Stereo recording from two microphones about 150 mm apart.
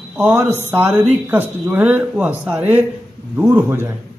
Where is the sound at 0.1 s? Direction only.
15° right (ahead or behind).